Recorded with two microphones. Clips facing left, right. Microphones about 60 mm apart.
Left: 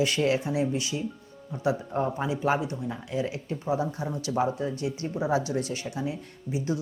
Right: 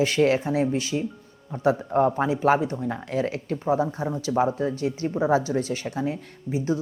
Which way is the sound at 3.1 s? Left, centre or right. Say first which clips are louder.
Right 3 dB; right.